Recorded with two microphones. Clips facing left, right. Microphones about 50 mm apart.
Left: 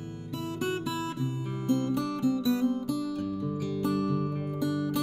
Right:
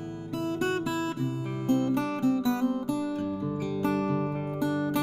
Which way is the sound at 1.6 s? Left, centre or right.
Right.